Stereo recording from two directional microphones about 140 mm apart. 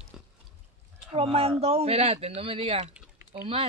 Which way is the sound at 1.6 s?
45° right (ahead or behind).